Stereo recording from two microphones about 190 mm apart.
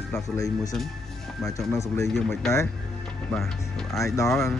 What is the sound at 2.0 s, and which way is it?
Speech, centre (ahead or behind).